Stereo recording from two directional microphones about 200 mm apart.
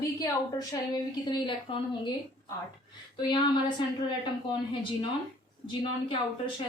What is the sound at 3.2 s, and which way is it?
Speech, 25° left (ahead or behind).